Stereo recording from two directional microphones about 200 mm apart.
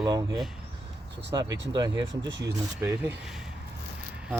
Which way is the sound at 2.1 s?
65° right (ahead or behind).